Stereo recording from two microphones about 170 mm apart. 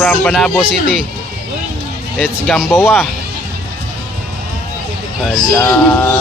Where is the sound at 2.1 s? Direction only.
5° left (ahead or behind).